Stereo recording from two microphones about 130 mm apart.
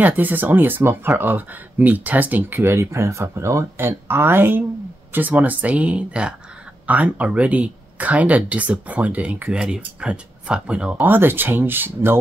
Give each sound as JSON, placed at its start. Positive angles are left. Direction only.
{"t": 0.0, "sound": "speech", "side_deg": -15}